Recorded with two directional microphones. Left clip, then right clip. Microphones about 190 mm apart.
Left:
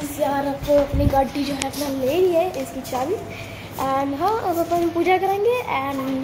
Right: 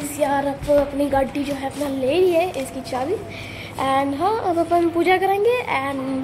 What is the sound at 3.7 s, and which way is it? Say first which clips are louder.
Child singing: right 2 dB; 20° right (ahead or behind).